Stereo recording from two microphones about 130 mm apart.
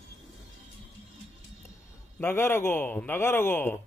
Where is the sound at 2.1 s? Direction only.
20° left (ahead or behind).